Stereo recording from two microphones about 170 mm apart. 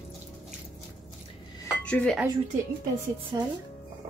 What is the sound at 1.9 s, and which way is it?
Speech, 5° left (ahead or behind).